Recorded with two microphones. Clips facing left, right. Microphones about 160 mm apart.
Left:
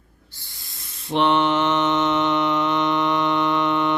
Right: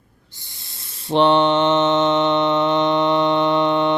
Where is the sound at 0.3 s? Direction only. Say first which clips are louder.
Right 1 dB; 20° right (ahead or behind).